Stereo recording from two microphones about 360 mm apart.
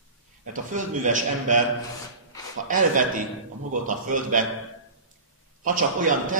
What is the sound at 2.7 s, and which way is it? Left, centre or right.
A man's voice, right.